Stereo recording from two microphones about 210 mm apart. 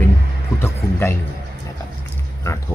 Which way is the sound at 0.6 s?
10° left (ahead or behind).